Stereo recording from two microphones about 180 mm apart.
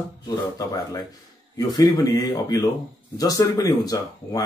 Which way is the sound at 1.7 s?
20° left (ahead or behind).